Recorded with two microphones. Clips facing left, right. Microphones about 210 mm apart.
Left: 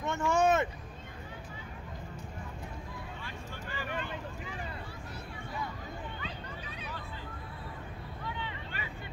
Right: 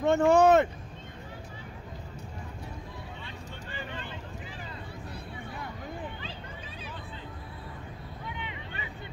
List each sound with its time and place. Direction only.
0.0 s speech: 60° right (ahead or behind)
8.3 s vehicle: 15° right (ahead or behind)